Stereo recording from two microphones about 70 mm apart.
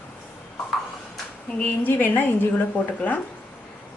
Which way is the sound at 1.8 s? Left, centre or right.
Left.